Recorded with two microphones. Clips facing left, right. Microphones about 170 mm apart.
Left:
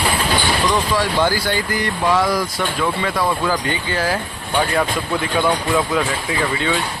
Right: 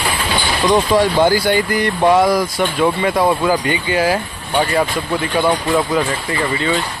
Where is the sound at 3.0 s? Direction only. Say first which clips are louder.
Right 5 dB; 20° right (ahead or behind).